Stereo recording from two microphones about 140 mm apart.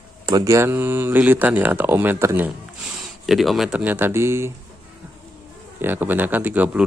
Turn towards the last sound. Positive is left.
turn(degrees=-10)  # may be behind; listen again after turning